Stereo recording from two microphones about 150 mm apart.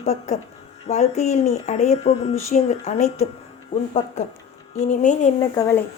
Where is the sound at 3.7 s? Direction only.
60° left (ahead or behind).